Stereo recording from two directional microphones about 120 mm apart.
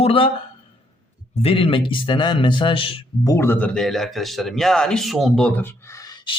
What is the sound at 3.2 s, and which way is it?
A man's voice, 20° left (ahead or behind).